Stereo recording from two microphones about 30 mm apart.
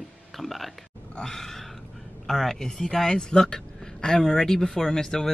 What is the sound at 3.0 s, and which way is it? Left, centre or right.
Speech, left.